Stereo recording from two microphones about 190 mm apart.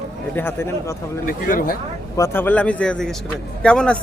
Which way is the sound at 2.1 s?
15° left (ahead or behind).